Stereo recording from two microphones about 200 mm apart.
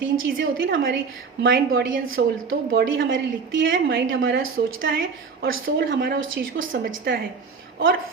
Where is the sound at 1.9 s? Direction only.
85° right.